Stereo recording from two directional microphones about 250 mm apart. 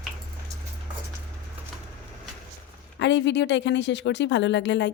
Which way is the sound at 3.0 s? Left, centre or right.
Left.